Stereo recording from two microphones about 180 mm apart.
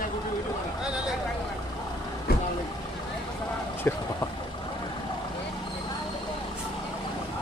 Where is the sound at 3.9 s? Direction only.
15° left (ahead or behind).